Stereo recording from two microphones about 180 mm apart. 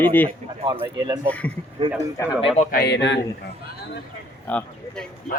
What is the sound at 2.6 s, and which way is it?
Speech, 60° left (ahead or behind).